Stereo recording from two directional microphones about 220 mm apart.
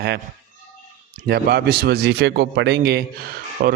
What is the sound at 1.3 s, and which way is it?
A man's voice, 45° right (ahead or behind).